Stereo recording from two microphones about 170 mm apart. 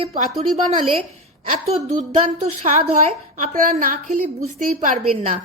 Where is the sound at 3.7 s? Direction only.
55° right (ahead or behind).